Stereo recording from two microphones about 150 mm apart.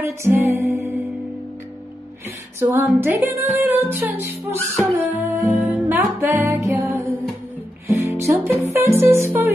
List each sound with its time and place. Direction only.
0.0 s music: 15° right (ahead or behind)
2.6 s music: 15° right (ahead or behind)